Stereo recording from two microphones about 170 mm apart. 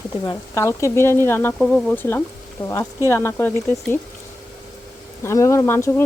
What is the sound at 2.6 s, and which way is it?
Speech, 30° left (ahead or behind).